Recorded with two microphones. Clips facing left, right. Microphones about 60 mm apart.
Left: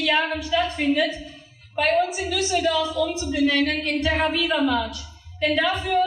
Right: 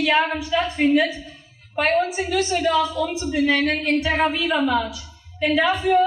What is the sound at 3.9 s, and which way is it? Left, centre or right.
A woman's voice, centre.